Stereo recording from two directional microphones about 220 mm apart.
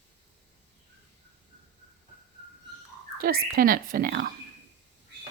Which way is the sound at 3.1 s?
40° right (ahead or behind).